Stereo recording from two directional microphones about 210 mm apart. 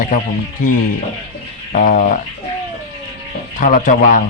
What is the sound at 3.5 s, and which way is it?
Speech, 40° left (ahead or behind).